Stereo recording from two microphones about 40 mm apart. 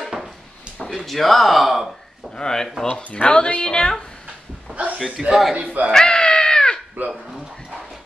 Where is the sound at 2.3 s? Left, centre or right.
Centre.